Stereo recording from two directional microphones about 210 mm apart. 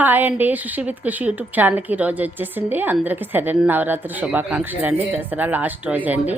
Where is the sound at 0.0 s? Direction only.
10° right (ahead or behind).